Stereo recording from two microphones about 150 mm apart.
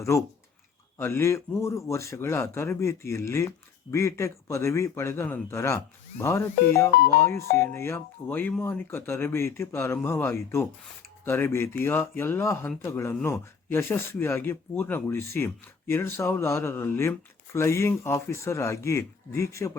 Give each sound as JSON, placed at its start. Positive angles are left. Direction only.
{"t": 0.0, "sound": "a man's voice", "side_deg": 20}